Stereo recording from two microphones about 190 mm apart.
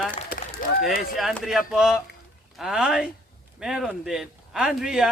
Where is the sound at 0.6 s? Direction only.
50° left (ahead or behind).